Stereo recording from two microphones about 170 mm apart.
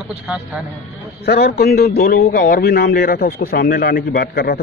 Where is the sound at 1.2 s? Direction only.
70° left (ahead or behind).